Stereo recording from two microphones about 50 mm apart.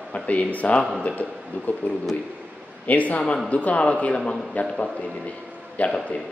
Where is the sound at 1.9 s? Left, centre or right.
Left.